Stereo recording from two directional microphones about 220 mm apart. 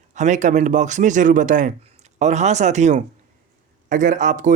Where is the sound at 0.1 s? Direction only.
35° right (ahead or behind).